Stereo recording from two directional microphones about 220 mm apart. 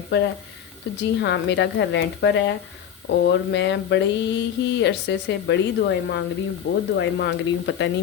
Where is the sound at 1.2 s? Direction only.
55° left (ahead or behind).